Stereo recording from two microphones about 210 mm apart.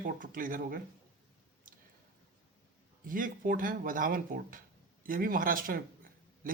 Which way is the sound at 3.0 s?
40° right (ahead or behind).